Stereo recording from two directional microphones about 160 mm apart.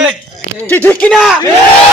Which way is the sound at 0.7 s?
10° left (ahead or behind).